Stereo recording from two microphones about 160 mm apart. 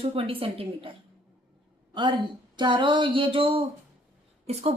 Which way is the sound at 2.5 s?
30° right (ahead or behind).